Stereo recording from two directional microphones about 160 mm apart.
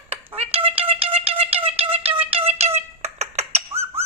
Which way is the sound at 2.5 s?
40° right (ahead or behind).